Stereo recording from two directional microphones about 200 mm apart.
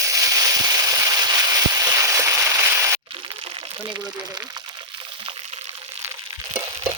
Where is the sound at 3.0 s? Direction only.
25° right (ahead or behind).